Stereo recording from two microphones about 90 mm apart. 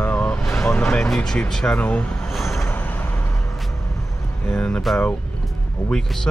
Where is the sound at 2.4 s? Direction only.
30° left (ahead or behind).